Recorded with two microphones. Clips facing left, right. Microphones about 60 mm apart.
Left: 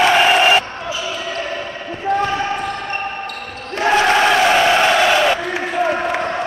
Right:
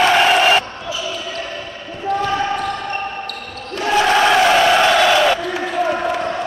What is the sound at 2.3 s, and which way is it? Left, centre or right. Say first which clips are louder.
Basketball bounce: right 1 dB; centre.